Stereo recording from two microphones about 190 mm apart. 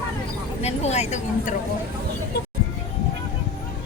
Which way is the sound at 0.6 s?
35° left (ahead or behind).